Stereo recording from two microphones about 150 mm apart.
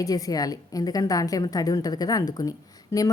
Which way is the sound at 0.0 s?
25° left (ahead or behind).